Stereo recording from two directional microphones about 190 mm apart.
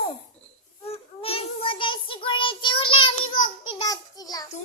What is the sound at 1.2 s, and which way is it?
Child singing, 30° left (ahead or behind).